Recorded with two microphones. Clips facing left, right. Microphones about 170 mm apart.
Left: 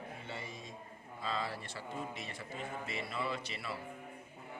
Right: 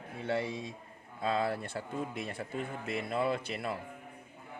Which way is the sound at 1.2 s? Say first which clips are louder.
Right 8 dB; 55° right (ahead or behind).